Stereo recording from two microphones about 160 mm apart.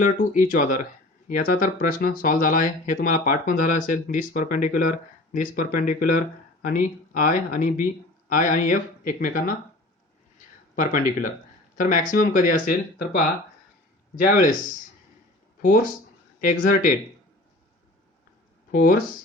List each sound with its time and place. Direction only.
0.0 s speech: 55° left (ahead or behind)
10.8 s speech: 55° left (ahead or behind)
15.6 s speech: 60° left (ahead or behind)
18.7 s speech: 60° left (ahead or behind)